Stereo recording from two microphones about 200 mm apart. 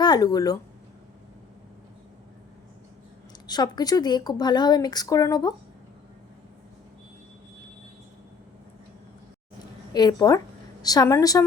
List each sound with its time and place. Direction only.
0.0 s speech: 20° left (ahead or behind)
3.4 s a woman's voice: 20° left (ahead or behind)
9.9 s a woman's voice: 20° left (ahead or behind)